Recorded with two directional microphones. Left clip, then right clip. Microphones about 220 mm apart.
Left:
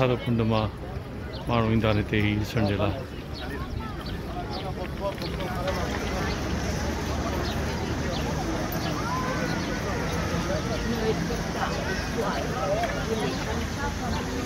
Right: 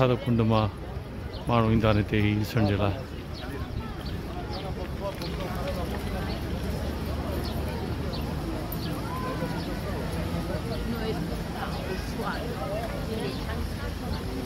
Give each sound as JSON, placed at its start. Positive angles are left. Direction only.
{"t": 0.0, "sound": "speech", "side_deg": -25}